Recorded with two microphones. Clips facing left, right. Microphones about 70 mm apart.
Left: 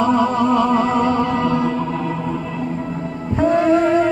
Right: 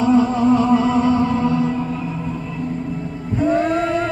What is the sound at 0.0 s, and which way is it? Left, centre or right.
Music, left.